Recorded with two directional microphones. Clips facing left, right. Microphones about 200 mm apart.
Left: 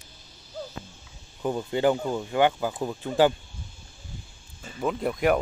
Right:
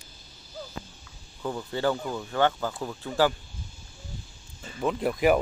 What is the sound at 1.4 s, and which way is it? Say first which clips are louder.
Speech: left 4 dB; 20° left (ahead or behind).